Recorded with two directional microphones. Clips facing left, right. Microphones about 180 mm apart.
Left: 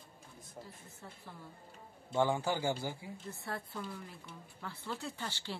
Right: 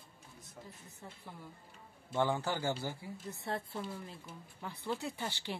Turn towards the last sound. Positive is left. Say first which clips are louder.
# right 2 dB
turn(degrees=-15)  # may be behind; listen again after turning